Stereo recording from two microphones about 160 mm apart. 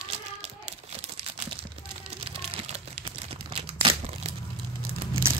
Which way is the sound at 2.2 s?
35° right (ahead or behind).